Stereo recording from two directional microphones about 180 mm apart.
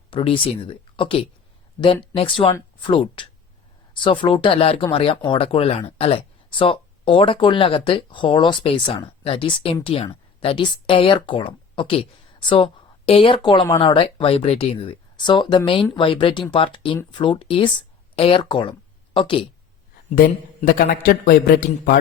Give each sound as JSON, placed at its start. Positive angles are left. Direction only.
{"t": 0.1, "sound": "speech", "side_deg": 30}
{"t": 20.1, "sound": "a man's voice", "side_deg": 45}